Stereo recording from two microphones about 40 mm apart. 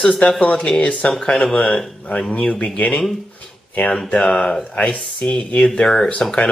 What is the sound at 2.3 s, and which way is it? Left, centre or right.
Speech, left.